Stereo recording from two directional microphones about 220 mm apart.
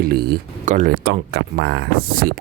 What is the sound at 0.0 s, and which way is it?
Speech, 45° right (ahead or behind).